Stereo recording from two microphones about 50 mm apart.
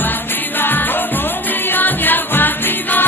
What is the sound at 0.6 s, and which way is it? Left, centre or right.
Music, left.